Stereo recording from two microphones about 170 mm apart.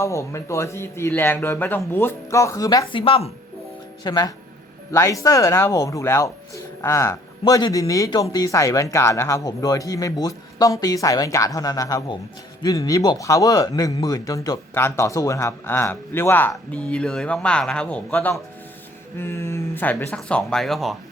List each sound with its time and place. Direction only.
0.0 s speech: 15° left (ahead or behind); by 3.3 s 35° left (ahead or behind)
4.0 s speech: 25° left (ahead or behind); by 20.9 s centre (ahead or behind)